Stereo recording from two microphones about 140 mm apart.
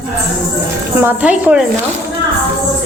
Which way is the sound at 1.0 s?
10° right (ahead or behind).